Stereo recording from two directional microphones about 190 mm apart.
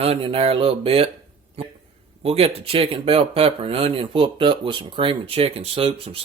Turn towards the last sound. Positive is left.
turn(degrees=-30)  # may be behind; listen again after turning